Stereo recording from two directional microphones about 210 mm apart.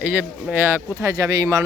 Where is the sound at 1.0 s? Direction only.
15° right (ahead or behind).